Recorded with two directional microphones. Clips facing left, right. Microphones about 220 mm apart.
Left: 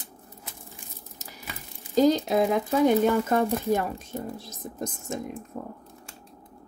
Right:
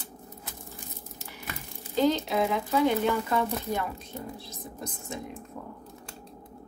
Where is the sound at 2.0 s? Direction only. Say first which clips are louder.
Left 4 dB; 40° left (ahead or behind).